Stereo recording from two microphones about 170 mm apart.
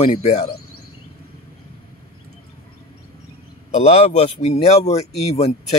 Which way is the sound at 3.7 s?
40° left (ahead or behind).